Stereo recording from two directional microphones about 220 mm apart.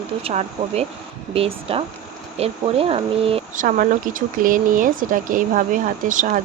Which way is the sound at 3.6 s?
40° right (ahead or behind).